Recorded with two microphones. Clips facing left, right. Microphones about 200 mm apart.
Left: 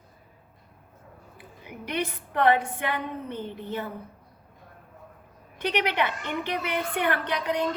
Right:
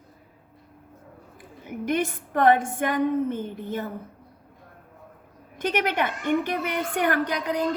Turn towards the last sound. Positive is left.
turn(degrees=-35)  # may be behind; listen again after turning